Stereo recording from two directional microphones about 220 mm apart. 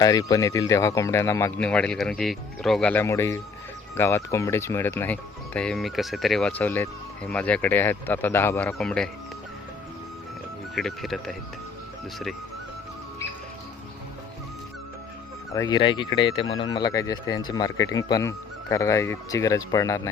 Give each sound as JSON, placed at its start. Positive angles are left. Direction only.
{"t": 0.0, "sound": "speech", "side_deg": 15}
{"t": 10.8, "sound": "speech", "side_deg": 0}
{"t": 15.5, "sound": "speech", "side_deg": 20}